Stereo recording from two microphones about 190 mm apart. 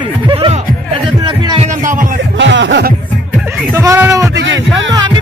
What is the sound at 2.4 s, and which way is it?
Music, 75° right (ahead or behind).